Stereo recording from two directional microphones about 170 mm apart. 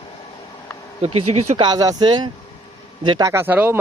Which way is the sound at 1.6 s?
20° right (ahead or behind).